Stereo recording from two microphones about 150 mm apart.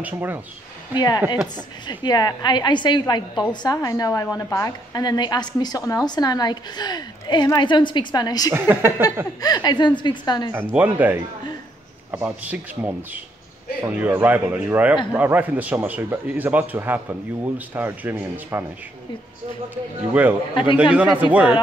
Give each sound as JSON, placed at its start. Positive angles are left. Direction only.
{"t": 0.0, "sound": "a man's voice", "side_deg": -15}
{"t": 0.9, "sound": "a woman's voice", "side_deg": 25}
{"t": 8.5, "sound": "a man's voice", "side_deg": -15}
{"t": 9.4, "sound": "a woman's voice", "side_deg": 25}
{"t": 10.7, "sound": "a man's voice", "side_deg": -10}
{"t": 20.2, "sound": "a man's voice", "side_deg": -10}